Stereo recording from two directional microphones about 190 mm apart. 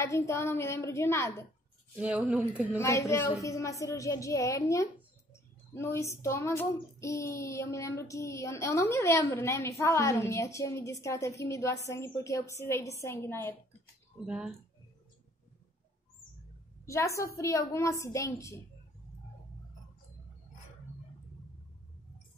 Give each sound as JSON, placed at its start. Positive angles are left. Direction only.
{"t": 0.1, "sound": "child singing", "side_deg": 15}
{"t": 2.0, "sound": "speech", "side_deg": -5}
{"t": 2.8, "sound": "child singing", "side_deg": 15}
{"t": 14.2, "sound": "speech", "side_deg": -5}
{"t": 16.8, "sound": "a woman's voice", "side_deg": 15}
{"t": 17.4, "sound": "child singing", "side_deg": 15}